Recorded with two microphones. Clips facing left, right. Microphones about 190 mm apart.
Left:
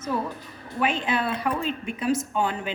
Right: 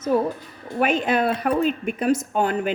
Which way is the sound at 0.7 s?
45° right (ahead or behind).